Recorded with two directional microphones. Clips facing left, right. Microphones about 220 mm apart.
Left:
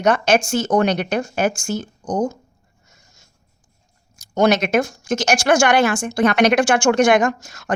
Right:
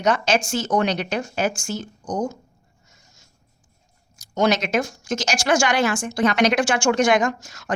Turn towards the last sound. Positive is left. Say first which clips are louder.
# left 3 dB
turn(degrees=55)  # may be behind; listen again after turning